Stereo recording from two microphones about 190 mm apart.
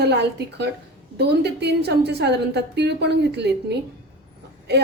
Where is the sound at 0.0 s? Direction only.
60° right (ahead or behind).